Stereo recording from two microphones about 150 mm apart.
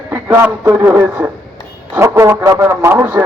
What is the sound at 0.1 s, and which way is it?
A man's voice, 15° right (ahead or behind).